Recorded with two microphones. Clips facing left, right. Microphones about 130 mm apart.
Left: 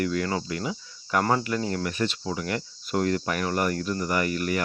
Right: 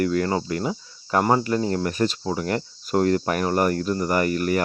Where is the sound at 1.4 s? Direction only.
35° right (ahead or behind).